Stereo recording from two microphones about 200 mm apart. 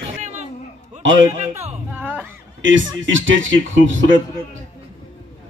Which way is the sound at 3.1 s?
70° right (ahead or behind).